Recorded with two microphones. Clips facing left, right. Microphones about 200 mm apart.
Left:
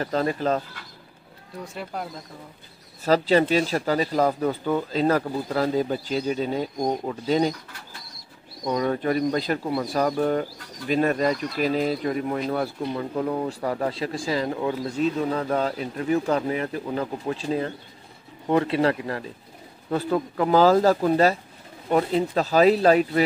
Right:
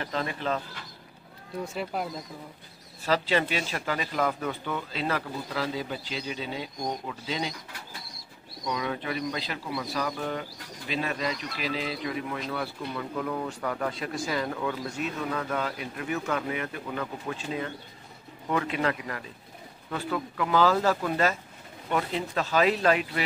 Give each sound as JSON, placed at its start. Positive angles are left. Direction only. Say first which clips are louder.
{"t": 0.0, "sound": "speech", "louder": "left 7 dB", "side_deg": 40}
{"t": 1.6, "sound": "speech", "louder": "right 1 dB", "side_deg": 0}
{"t": 3.1, "sound": "speech", "louder": "left 7 dB", "side_deg": 40}
{"t": 8.6, "sound": "speech", "louder": "left 8 dB", "side_deg": 40}